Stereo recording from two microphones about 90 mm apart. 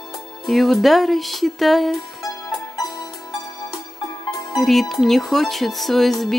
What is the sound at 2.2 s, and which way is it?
Music, 40° left (ahead or behind).